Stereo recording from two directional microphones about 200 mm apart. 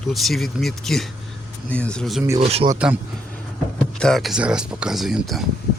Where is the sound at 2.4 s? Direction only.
30° right (ahead or behind).